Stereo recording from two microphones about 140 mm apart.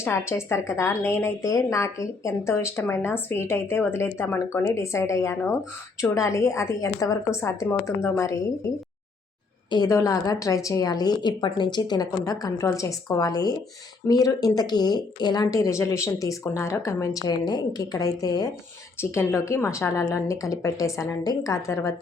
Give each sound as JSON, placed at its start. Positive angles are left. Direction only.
{"t": 0.0, "sound": "a woman's voice", "side_deg": 20}
{"t": 9.6, "sound": "a woman's voice", "side_deg": 30}